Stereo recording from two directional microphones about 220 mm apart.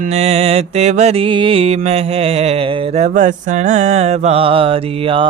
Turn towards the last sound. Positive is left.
turn(degrees=-25)  # may be behind; listen again after turning